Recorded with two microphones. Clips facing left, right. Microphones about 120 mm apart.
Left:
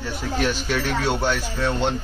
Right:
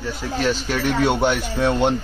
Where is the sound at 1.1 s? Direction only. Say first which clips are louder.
Right 4 dB; 20° right (ahead or behind).